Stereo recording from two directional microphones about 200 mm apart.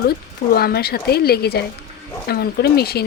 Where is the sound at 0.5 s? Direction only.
50° left (ahead or behind).